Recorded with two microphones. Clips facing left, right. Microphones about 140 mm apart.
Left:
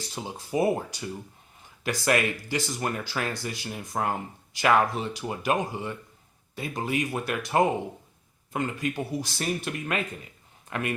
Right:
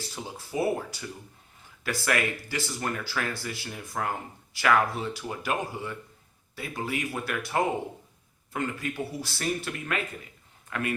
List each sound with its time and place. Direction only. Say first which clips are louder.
0.1 s speech: left 7 dB; 20° left (ahead or behind)